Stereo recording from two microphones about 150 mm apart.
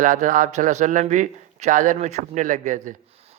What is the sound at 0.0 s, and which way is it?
Speech, 55° right (ahead or behind).